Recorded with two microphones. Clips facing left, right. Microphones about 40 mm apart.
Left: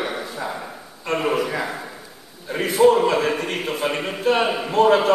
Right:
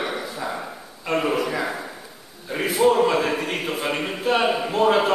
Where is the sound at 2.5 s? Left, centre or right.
Centre.